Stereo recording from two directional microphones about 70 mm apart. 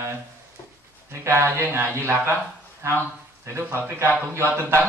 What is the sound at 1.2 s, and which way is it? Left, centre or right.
Speech, right.